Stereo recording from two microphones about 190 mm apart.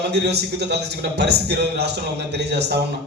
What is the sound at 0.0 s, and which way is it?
A man's voice, 60° right (ahead or behind).